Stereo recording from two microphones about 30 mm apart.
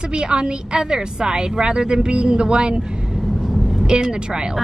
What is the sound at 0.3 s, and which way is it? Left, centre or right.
A woman's voice, right.